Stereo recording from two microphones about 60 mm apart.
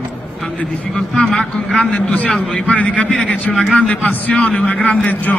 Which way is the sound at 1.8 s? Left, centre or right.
Centre.